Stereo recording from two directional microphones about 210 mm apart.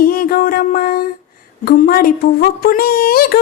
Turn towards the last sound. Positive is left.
turn(degrees=45)  # may be behind; listen again after turning